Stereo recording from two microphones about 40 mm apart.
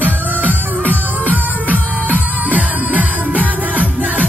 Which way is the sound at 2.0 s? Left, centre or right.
Right.